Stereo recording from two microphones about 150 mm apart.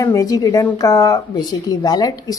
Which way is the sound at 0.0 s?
20° left (ahead or behind).